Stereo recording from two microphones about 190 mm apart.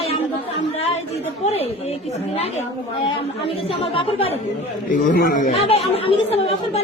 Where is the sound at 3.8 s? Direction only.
30° left (ahead or behind).